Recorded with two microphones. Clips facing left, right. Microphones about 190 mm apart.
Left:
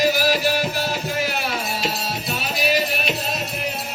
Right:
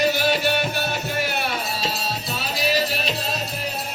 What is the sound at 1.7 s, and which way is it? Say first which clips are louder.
Music: left 1 dB; 30° right (ahead or behind).